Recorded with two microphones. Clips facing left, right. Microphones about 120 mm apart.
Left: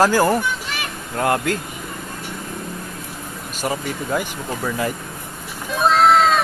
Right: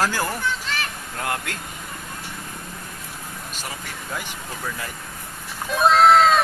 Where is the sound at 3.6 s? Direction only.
50° left (ahead or behind).